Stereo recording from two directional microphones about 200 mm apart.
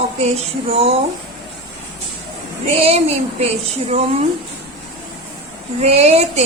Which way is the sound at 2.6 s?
30° right (ahead or behind).